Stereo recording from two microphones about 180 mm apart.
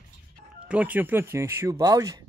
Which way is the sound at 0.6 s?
5° right (ahead or behind).